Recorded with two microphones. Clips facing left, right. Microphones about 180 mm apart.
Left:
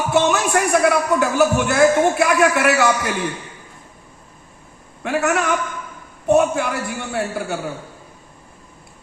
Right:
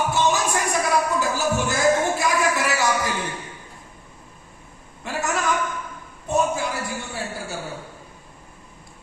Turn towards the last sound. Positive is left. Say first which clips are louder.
# left 7 dB
turn(degrees=60)  # may be behind; listen again after turning